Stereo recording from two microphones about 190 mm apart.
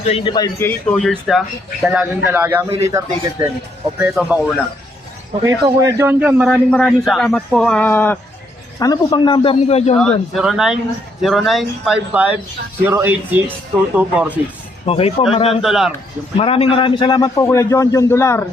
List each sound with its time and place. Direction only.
0.0 s a man's voice: 30° left (ahead or behind)
0.9 s a man's voice: 5° left (ahead or behind); by 2.6 s 10° right (ahead or behind)
2.6 s a man's voice: 30° right (ahead or behind)
3.9 s a man's voice: 5° right (ahead or behind)
5.4 s a man's voice: 15° right (ahead or behind); by 9.9 s 35° left (ahead or behind)
9.9 s a man's voice: 5° left (ahead or behind)
14.8 s a man's voice: 30° left (ahead or behind)
15.6 s a man's voice: centre (ahead or behind)
16.4 s a man's voice: 30° left (ahead or behind); by 18.4 s 15° left (ahead or behind)